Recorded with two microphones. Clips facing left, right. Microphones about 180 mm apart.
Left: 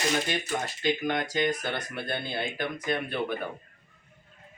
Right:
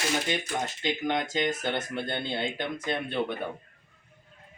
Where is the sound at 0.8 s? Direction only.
20° right (ahead or behind).